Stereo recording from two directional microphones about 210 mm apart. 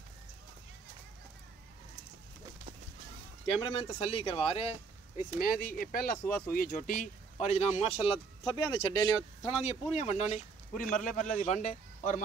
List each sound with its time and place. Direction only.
3.4 s a man's voice: 25° left (ahead or behind)
5.4 s a man's voice: 45° left (ahead or behind)